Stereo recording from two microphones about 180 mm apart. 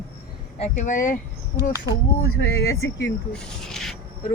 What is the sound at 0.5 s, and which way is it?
Speech, 40° left (ahead or behind).